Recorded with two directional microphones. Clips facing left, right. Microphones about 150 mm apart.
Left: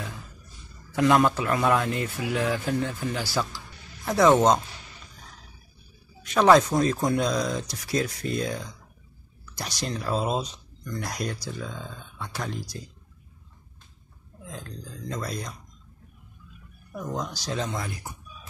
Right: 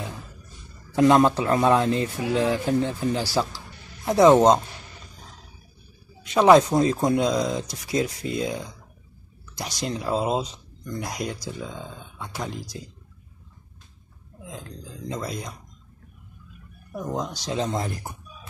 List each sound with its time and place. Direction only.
0.9 s speech: 25° right (ahead or behind)
4.0 s speech: 20° right (ahead or behind)
6.2 s speech: 20° right (ahead or behind)
14.4 s speech: 15° right (ahead or behind)
17.2 s speech: 20° right (ahead or behind)
17.6 s speech: 35° right (ahead or behind)